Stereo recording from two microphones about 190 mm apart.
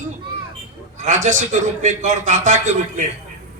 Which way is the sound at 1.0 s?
40° right (ahead or behind).